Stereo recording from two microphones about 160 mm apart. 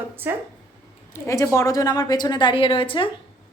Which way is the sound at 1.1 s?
20° left (ahead or behind).